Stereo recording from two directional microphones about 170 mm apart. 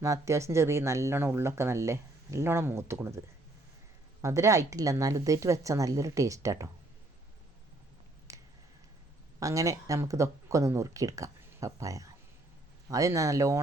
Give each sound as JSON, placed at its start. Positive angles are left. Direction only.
{"t": 0.0, "sound": "speech", "side_deg": -20}
{"t": 8.3, "sound": "a sound", "side_deg": -20}
{"t": 9.4, "sound": "speech", "side_deg": -20}